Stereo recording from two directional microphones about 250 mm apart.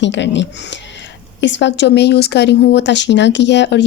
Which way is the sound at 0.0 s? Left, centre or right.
Left.